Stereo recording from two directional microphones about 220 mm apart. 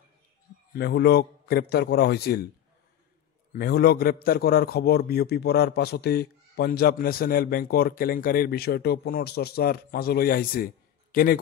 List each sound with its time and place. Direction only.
0.7 s a man's voice: 50° left (ahead or behind)
3.5 s a man's voice: 45° left (ahead or behind)